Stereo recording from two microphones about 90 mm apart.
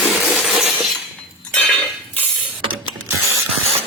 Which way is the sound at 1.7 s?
20° left (ahead or behind).